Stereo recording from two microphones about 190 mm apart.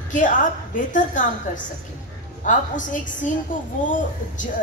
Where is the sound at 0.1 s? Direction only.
40° left (ahead or behind).